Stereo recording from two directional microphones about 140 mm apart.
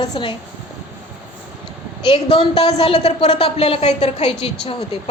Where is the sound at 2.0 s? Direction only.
35° left (ahead or behind).